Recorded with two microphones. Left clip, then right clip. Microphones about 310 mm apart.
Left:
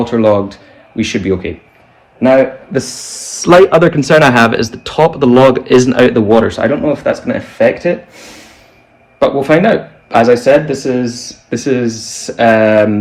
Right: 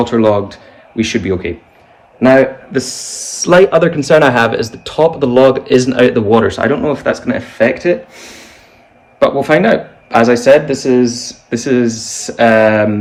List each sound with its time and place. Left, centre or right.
0.0 s speech: centre
2.7 s speech: centre
6.3 s speech: centre